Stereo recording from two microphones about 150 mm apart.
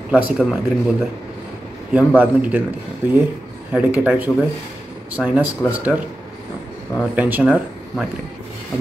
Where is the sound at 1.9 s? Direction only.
10° right (ahead or behind).